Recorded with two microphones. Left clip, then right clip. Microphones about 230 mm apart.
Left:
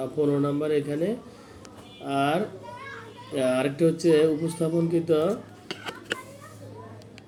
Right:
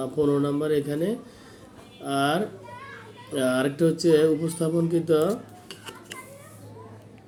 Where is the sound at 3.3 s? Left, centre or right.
Centre.